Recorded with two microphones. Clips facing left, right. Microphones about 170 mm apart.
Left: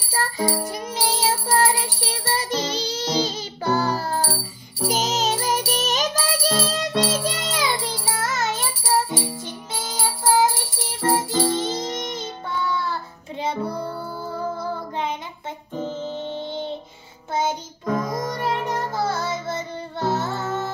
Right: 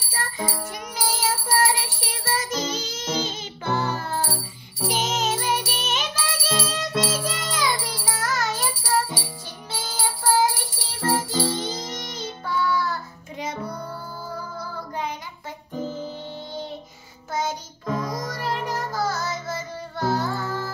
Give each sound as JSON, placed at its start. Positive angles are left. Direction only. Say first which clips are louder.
{"t": 0.1, "sound": "music", "louder": "left 6 dB", "side_deg": 35}
{"t": 14.6, "sound": "child singing", "louder": "left 4 dB", "side_deg": 25}
{"t": 15.7, "sound": "music", "louder": "left 2 dB", "side_deg": 25}